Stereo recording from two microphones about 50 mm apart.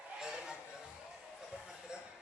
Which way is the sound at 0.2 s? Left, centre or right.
Centre.